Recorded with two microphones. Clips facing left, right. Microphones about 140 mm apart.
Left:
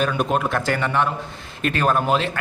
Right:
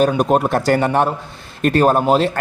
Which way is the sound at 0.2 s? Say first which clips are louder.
Right 6 dB; 40° right (ahead or behind).